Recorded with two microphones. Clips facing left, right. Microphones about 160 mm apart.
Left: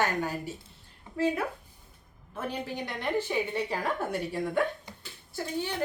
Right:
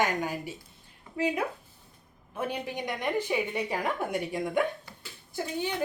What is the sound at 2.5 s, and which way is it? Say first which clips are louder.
A woman's voice: left 1 dB; 15° right (ahead or behind).